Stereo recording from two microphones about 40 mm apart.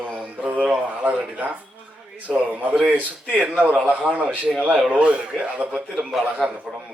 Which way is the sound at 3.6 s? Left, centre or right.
Right.